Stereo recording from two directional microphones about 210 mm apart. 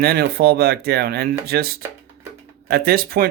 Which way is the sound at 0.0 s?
45° right (ahead or behind).